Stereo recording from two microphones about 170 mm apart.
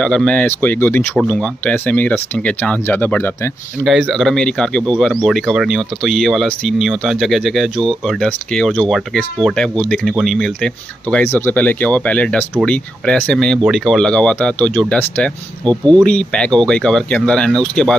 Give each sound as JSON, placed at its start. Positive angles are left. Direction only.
{"t": 0.0, "sound": "speech", "side_deg": 5}
{"t": 3.8, "sound": "speech", "side_deg": 0}